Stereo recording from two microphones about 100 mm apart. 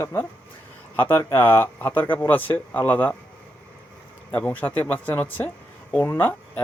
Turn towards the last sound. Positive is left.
turn(degrees=20)  # may be behind; listen again after turning